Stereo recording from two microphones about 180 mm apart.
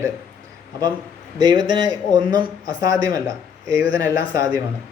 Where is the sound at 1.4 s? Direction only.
25° right (ahead or behind).